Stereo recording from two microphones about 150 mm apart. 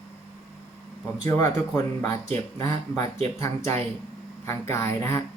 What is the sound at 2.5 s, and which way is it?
Speech, 20° left (ahead or behind).